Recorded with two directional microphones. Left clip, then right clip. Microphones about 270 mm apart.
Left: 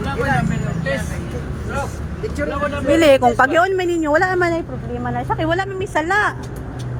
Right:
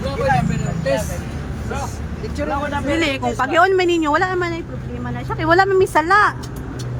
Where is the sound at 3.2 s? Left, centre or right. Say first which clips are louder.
Left 2 dB; centre.